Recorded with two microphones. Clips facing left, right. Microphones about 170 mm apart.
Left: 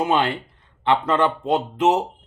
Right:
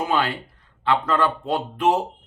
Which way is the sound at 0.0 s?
20° left (ahead or behind).